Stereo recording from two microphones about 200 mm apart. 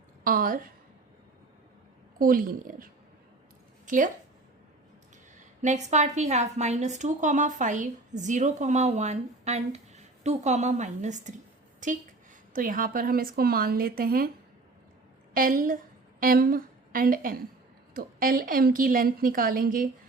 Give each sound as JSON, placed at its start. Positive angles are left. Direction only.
{"t": 0.3, "sound": "a woman's voice", "side_deg": -45}
{"t": 2.1, "sound": "a woman's voice", "side_deg": -45}
{"t": 5.6, "sound": "a woman's voice", "side_deg": -35}
{"t": 15.3, "sound": "a woman's voice", "side_deg": -45}